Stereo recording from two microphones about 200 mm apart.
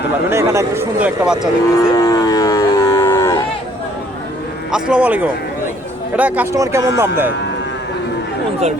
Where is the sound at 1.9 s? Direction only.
20° left (ahead or behind).